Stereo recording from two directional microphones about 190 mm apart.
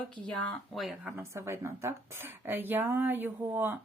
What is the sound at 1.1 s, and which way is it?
Speech, 15° right (ahead or behind).